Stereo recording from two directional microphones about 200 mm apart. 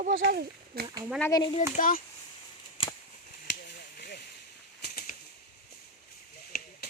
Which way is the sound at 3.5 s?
55° left (ahead or behind).